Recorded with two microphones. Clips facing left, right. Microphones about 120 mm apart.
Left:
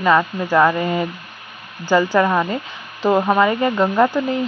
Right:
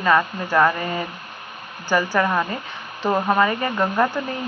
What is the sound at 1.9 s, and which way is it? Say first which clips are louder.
Speech: left 4 dB; 15° left (ahead or behind).